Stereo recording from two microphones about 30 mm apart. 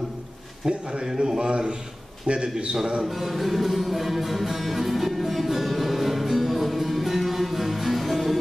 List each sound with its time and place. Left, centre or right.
0.7 s a man's voice: right
3.1 s music: centre